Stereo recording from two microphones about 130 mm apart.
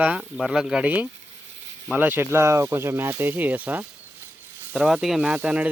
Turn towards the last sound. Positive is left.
turn(degrees=-10)  # may be behind; listen again after turning